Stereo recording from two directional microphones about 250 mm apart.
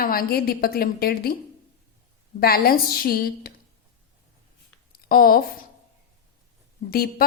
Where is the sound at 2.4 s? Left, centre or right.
Left.